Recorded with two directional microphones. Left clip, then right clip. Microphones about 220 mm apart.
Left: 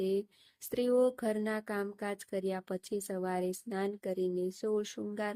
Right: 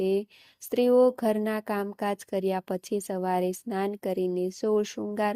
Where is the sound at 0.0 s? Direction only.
25° right (ahead or behind).